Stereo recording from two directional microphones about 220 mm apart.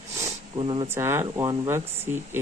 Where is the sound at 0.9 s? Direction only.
10° right (ahead or behind).